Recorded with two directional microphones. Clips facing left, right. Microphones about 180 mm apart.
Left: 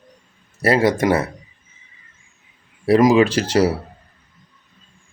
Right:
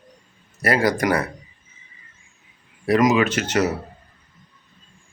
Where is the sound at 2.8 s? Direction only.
30° left (ahead or behind).